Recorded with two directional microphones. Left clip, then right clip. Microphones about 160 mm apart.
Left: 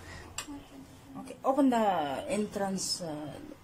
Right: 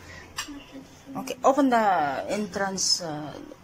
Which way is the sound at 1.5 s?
10° left (ahead or behind).